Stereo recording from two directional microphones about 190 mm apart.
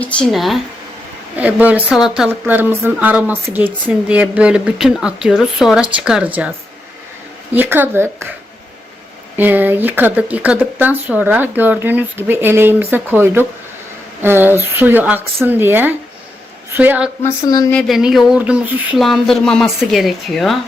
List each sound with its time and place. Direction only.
0.0 s speech: 5° left (ahead or behind)
7.5 s speech: 10° right (ahead or behind)
9.4 s speech: 10° right (ahead or behind)
17.2 s speech: 20° left (ahead or behind)
17.7 s speech: 5° left (ahead or behind)